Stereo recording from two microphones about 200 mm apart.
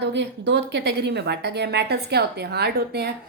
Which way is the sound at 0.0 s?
60° right (ahead or behind).